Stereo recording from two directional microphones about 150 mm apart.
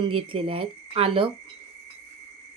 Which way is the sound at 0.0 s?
35° right (ahead or behind).